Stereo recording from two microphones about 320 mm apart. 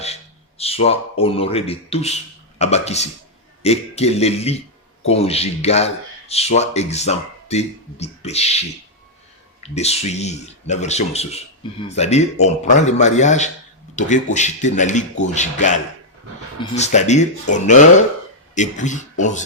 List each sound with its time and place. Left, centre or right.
0.6 s speech: centre
9.6 s speech: centre